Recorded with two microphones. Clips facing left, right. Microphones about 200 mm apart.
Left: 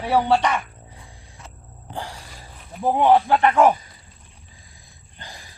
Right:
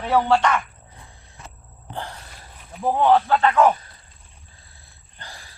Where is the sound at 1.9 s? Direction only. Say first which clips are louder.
Even; 10° left (ahead or behind).